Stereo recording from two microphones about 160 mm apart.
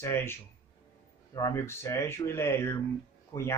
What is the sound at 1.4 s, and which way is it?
A man's voice, 15° left (ahead or behind).